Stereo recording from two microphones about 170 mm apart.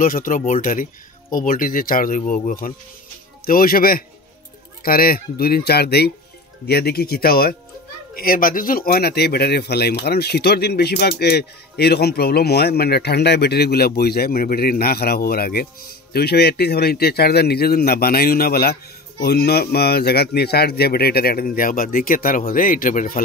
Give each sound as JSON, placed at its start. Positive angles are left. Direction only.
{"t": 0.0, "sound": "speech", "side_deg": 55}